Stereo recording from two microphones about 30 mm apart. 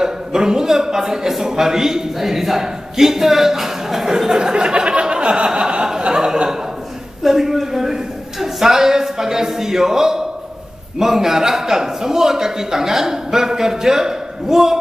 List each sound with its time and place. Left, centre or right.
0.0 s a man's voice: right
4.2 s a sound: right
6.1 s speech: right
7.2 s a man's voice: centre